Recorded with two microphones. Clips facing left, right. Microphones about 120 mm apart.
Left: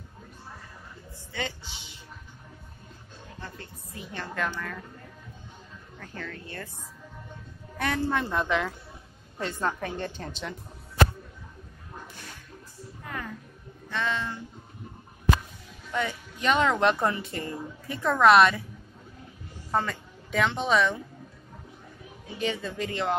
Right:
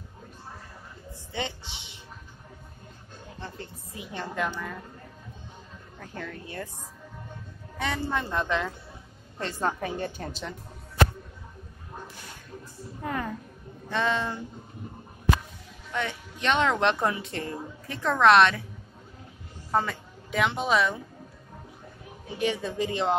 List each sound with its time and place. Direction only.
1.3 s a woman's voice: 25° right (ahead or behind)
3.3 s a woman's voice: 20° right (ahead or behind)
5.9 s a woman's voice: 10° right (ahead or behind)
7.8 s a woman's voice: centre (ahead or behind)
13.0 s a sound: 35° right (ahead or behind)
13.8 s a woman's voice: 30° right (ahead or behind)
15.9 s a woman's voice: 5° left (ahead or behind)
19.7 s a woman's voice: 5° right (ahead or behind)
22.4 s a woman's voice: 15° right (ahead or behind)